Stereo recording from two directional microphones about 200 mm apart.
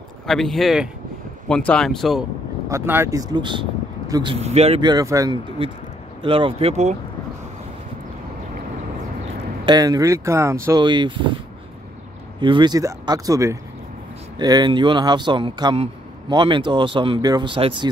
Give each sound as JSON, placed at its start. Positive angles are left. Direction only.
{"t": 0.3, "sound": "speech", "side_deg": 0}
{"t": 2.7, "sound": "speech", "side_deg": -10}
{"t": 9.7, "sound": "speech", "side_deg": -20}
{"t": 12.4, "sound": "speech", "side_deg": -25}